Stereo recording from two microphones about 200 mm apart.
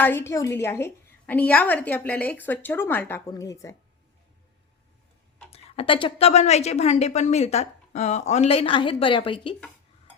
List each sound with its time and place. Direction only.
0.0 s a woman's voice: 10° left (ahead or behind)
5.5 s a woman's voice: 30° left (ahead or behind)